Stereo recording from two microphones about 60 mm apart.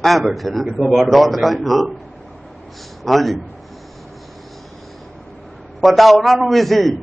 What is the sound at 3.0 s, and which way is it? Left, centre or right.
Speech, centre.